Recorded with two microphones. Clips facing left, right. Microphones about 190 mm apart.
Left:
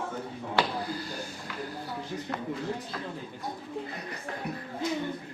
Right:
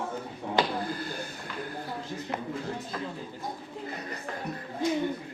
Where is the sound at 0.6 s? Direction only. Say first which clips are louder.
Right 1 dB; 15° right (ahead or behind).